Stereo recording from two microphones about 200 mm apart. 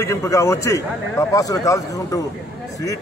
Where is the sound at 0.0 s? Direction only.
15° left (ahead or behind).